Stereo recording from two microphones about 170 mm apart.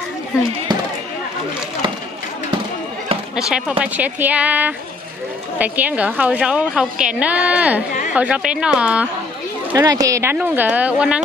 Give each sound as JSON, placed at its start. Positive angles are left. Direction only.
{"t": 0.7, "sound": "a sound", "side_deg": -25}
{"t": 3.3, "sound": "a woman's voice", "side_deg": -5}
{"t": 9.8, "sound": "a woman's voice", "side_deg": -20}